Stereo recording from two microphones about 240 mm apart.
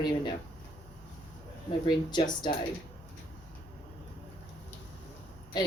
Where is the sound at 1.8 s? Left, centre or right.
Centre.